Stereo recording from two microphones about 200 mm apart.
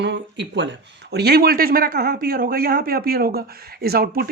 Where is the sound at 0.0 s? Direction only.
60° right (ahead or behind).